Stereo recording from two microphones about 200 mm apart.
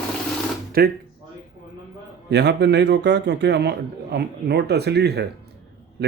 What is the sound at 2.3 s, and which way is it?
A man's voice, 60° right (ahead or behind).